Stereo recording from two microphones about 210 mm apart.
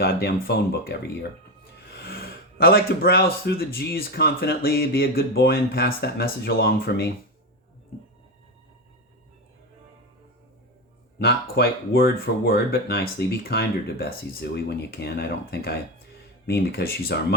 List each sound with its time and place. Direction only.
0.0 s speech: 50° left (ahead or behind)
11.2 s speech: 45° left (ahead or behind)